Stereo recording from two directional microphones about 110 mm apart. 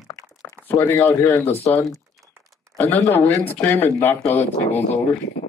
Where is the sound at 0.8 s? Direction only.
30° left (ahead or behind).